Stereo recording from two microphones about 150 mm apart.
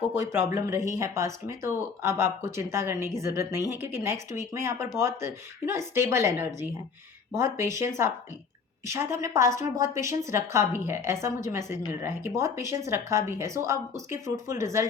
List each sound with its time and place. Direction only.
0.1 s a woman's voice: 15° right (ahead or behind)
7.5 s a woman's voice: 20° right (ahead or behind)